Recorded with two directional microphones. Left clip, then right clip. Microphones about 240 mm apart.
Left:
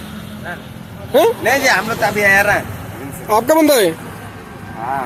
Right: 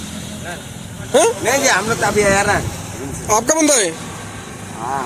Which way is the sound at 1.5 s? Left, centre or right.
Left.